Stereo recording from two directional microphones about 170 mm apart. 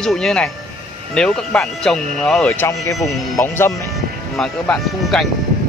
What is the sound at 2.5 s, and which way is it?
Speech, 15° left (ahead or behind).